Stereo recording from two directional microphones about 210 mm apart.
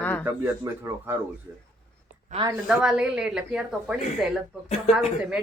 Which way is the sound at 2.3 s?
20° right (ahead or behind).